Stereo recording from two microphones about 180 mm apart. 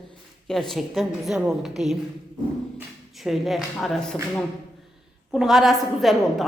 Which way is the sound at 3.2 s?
Centre (ahead or behind).